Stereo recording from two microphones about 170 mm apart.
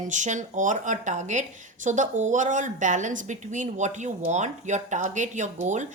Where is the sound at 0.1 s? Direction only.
45° right (ahead or behind).